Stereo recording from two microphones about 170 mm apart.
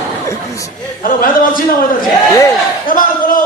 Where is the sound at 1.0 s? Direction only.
55° left (ahead or behind).